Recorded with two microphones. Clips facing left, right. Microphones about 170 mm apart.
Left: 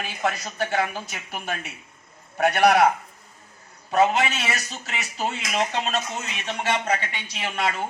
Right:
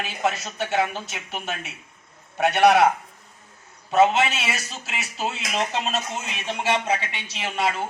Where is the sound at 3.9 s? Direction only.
5° right (ahead or behind).